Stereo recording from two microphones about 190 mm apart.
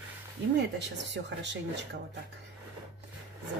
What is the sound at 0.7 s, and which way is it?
Speech, 70° right (ahead or behind).